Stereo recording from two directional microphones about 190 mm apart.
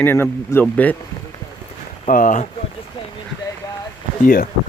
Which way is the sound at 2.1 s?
40° left (ahead or behind).